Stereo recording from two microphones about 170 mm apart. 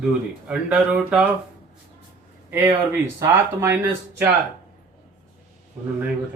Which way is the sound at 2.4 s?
15° right (ahead or behind).